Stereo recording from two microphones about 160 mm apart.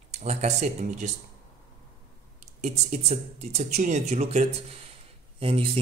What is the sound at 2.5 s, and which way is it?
Speech, 40° right (ahead or behind).